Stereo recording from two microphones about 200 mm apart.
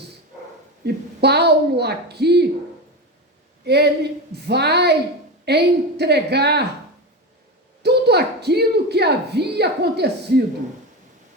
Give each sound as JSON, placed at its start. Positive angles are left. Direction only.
{"t": 0.8, "sound": "speech", "side_deg": -55}
{"t": 3.6, "sound": "speech", "side_deg": -55}
{"t": 7.8, "sound": "speech", "side_deg": -55}